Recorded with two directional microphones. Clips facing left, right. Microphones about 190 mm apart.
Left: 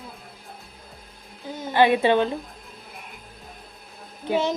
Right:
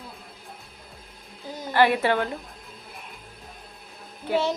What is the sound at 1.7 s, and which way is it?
Speech, 20° left (ahead or behind).